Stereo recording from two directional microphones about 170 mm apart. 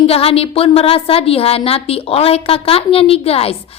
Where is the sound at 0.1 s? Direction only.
35° left (ahead or behind).